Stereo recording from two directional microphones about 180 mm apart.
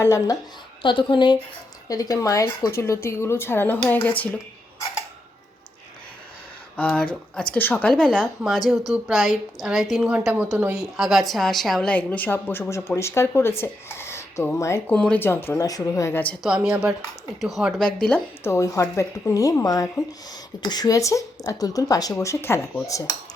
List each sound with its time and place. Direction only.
0.0 s speech: 20° left (ahead or behind)
6.7 s a woman's voice: 10° left (ahead or behind)